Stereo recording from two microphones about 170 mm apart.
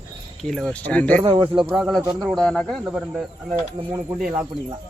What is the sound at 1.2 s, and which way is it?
Speech, 30° right (ahead or behind).